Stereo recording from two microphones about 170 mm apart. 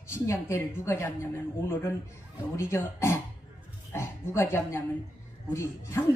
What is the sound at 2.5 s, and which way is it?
A woman's voice, 15° left (ahead or behind).